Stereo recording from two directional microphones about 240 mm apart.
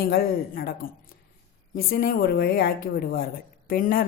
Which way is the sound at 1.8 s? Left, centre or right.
Left.